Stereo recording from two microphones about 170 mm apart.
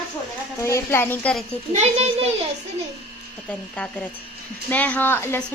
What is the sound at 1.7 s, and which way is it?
Speech, 40° right (ahead or behind).